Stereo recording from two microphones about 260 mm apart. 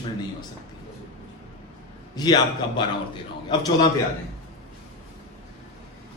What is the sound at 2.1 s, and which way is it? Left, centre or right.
Speech, centre.